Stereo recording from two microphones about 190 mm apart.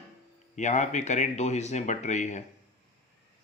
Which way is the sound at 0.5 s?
40° left (ahead or behind).